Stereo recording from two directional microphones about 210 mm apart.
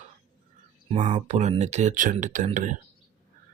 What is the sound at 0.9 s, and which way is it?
Speech, 30° right (ahead or behind).